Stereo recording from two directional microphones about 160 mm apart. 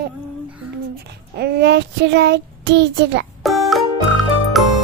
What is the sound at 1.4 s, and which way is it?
A child's voice, 90° right.